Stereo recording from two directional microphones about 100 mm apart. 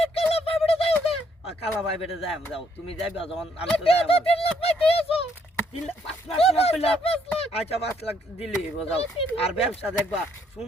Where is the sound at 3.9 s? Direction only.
75° left (ahead or behind).